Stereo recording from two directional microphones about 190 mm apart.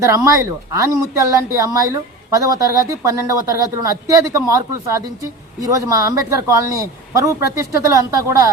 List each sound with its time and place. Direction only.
0.0 s speech: 15° right (ahead or behind)